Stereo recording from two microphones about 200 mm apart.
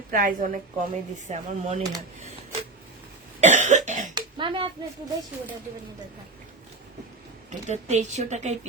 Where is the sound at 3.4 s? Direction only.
35° right (ahead or behind).